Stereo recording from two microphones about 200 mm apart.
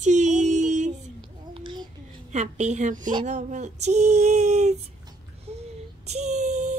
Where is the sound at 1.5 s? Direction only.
25° right (ahead or behind).